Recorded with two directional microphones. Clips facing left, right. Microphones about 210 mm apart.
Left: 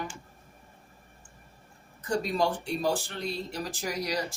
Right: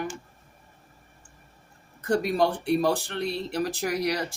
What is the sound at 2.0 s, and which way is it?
Speech, 60° right (ahead or behind).